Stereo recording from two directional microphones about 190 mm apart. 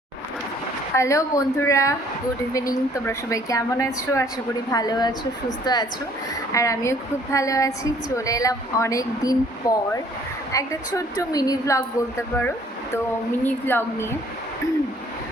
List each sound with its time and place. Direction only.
0.9 s a woman's voice: 15° left (ahead or behind)